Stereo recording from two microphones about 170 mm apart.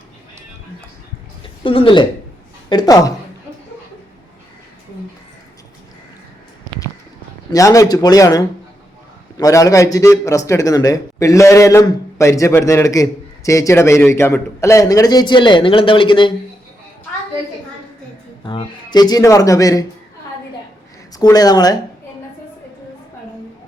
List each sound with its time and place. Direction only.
1.6 s speech: 30° left (ahead or behind)
7.5 s a man's voice: 20° left (ahead or behind)
18.4 s a man's voice: 25° left (ahead or behind)
21.2 s a man's voice: 20° left (ahead or behind)